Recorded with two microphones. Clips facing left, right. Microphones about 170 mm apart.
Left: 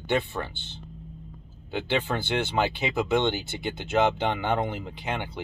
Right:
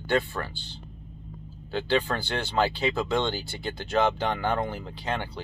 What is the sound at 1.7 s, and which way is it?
Speech, 20° left (ahead or behind).